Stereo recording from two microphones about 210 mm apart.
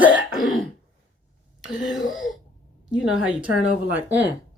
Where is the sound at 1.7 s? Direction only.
40° left (ahead or behind).